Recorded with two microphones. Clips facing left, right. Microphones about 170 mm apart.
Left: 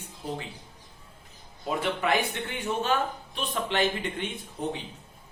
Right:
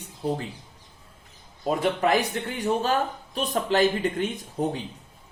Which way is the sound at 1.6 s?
40° right (ahead or behind).